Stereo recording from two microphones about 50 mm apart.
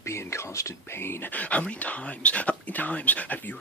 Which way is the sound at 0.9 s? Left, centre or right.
Left.